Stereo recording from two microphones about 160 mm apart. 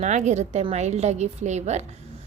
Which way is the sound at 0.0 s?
45° right (ahead or behind).